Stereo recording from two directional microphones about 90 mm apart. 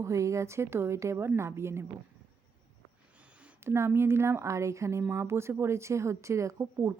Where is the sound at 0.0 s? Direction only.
35° right (ahead or behind).